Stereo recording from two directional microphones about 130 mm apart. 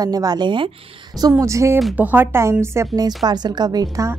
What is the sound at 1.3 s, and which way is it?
A woman's voice, 25° right (ahead or behind).